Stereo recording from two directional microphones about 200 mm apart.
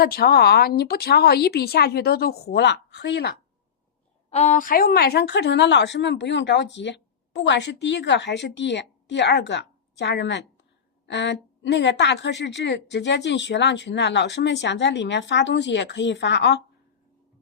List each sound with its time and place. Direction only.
0.0 s a woman's voice: 50° left (ahead or behind)
4.3 s speech: 35° left (ahead or behind); by 16.6 s 60° left (ahead or behind)